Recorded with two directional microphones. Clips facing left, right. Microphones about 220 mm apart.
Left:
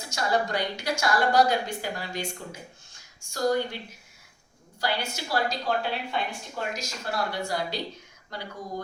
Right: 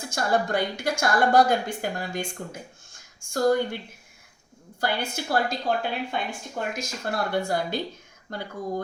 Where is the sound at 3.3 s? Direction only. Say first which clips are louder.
Right 4 dB; 50° right (ahead or behind).